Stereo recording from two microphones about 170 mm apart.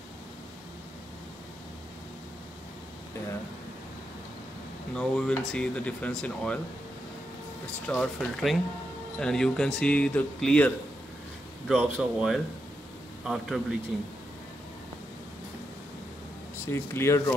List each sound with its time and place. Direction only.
4.9 s speech: 5° left (ahead or behind)
7.8 s speech: 5° left (ahead or behind)
11.6 s speech: 5° right (ahead or behind)
16.6 s speech: 15° left (ahead or behind)